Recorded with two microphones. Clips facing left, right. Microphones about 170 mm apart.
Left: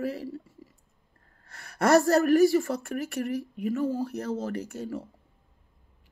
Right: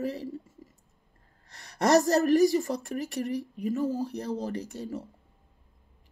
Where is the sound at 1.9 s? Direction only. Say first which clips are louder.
Left 2 dB; 20° right (ahead or behind).